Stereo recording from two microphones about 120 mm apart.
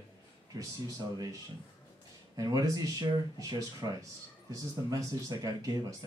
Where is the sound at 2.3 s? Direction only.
30° right (ahead or behind).